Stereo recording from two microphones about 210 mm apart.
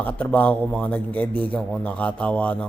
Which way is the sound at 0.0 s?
5° left (ahead or behind).